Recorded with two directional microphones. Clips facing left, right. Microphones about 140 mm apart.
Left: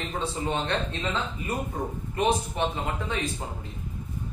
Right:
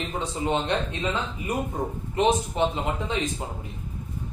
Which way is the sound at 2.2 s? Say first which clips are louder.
Right 3 dB; 20° right (ahead or behind).